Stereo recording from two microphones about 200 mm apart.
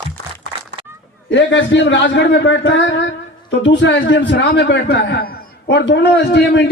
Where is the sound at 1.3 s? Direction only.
65° left (ahead or behind).